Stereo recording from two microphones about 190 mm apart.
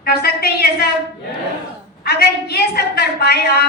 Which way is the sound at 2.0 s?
55° left (ahead or behind).